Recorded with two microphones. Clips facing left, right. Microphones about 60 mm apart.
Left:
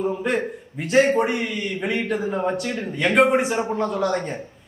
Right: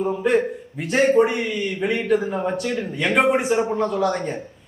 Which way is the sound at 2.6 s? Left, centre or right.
Left.